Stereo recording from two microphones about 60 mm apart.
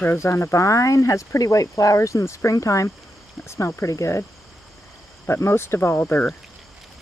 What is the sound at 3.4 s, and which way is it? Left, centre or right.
Speech, left.